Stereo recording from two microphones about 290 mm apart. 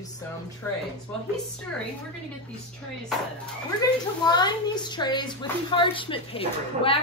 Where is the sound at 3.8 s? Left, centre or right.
Centre.